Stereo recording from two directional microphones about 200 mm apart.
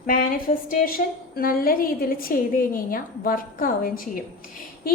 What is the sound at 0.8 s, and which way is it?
A woman's voice, 45° left (ahead or behind).